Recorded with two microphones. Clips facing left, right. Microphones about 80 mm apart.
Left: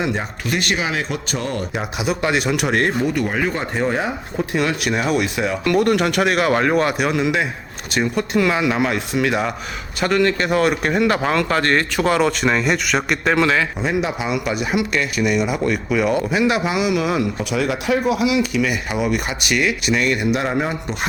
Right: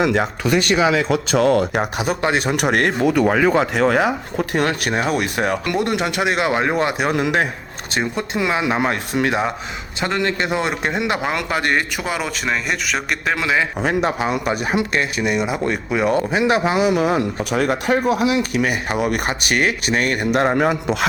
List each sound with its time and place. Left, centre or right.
0.0 s speech: right
1.7 s speech: right
2.2 s speech: right
2.6 s speech: right
3.0 s speech: right
5.6 s speech: right
7.1 s speech: right
7.9 s speech: right
10.0 s a man's voice: right; by 13.6 s centre
14.0 s speech: right
20.6 s a man's voice: right